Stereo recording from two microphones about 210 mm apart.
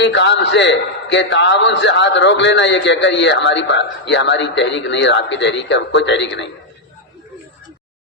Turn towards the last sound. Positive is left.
turn(degrees=55)  # may be behind; listen again after turning